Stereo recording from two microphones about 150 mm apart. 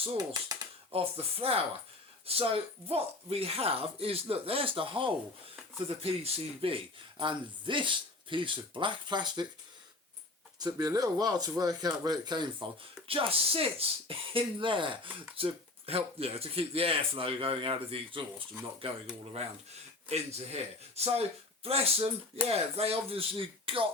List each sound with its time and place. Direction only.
0.9 s speech: 40° right (ahead or behind)
10.6 s speech: 25° right (ahead or behind)